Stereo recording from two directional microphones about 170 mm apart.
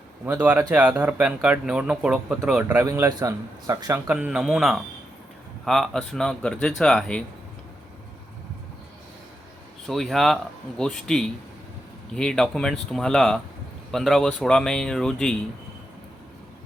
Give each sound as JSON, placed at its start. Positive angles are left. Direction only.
{"t": 0.3, "sound": "speech", "side_deg": -10}
{"t": 4.0, "sound": "speech", "side_deg": -10}
{"t": 9.8, "sound": "speech", "side_deg": 0}